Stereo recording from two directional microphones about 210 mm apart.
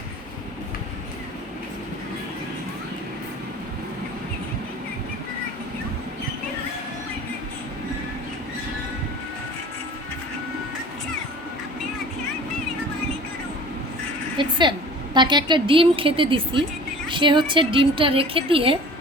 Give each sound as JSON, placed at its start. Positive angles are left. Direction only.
{"t": 14.3, "sound": "a woman's voice", "side_deg": -20}